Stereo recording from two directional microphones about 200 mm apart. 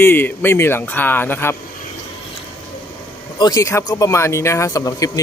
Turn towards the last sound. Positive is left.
turn(degrees=15)  # may be behind; listen again after turning